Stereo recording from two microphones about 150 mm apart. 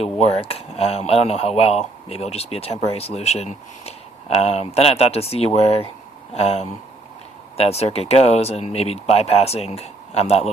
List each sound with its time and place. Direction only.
0.0 s speech: 40° left (ahead or behind)